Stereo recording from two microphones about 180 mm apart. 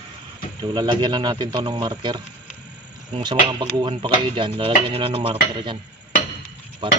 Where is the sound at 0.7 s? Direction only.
25° right (ahead or behind).